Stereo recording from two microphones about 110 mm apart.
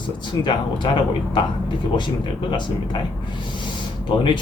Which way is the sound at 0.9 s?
50° left (ahead or behind).